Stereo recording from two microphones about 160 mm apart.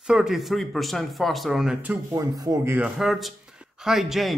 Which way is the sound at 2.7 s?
5° right (ahead or behind).